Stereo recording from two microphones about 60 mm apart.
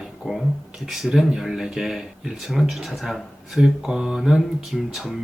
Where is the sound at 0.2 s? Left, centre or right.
Centre.